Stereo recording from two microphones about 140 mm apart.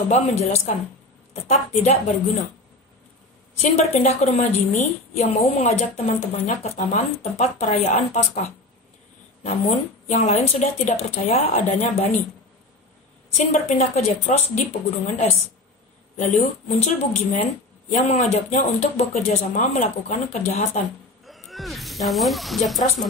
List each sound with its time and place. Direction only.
0.1 s a woman's voice: 50° left (ahead or behind)
3.7 s a woman's voice: 50° left (ahead or behind)
13.3 s a woman's voice: 50° left (ahead or behind)
21.3 s speech: centre (ahead or behind)